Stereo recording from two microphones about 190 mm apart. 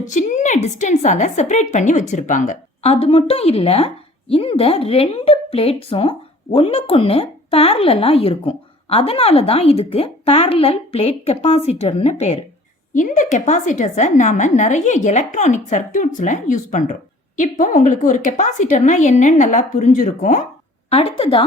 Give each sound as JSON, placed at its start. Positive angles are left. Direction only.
{"t": 0.0, "sound": "a woman's voice", "side_deg": 40}
{"t": 20.9, "sound": "a woman's voice", "side_deg": 30}